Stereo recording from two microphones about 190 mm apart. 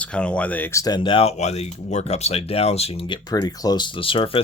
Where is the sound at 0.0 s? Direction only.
5° left (ahead or behind).